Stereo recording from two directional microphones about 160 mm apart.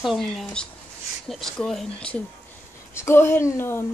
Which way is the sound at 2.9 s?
15° left (ahead or behind).